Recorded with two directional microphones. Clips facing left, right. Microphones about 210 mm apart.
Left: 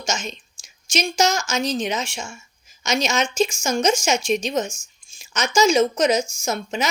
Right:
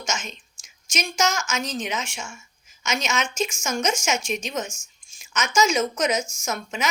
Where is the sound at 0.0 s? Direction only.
30° left (ahead or behind).